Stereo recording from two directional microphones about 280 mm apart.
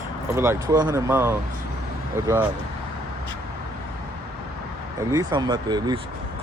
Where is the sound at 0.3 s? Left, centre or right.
Centre.